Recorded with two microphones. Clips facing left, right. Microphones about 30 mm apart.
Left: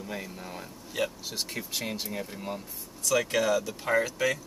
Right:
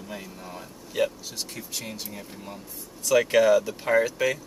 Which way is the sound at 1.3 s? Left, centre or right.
Centre.